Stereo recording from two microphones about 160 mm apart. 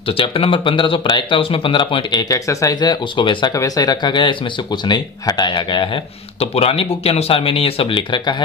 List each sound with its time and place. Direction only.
0.0 s speech: 35° left (ahead or behind)